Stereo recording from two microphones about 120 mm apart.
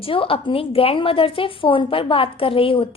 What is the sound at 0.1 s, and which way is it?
A woman's voice, 50° left (ahead or behind).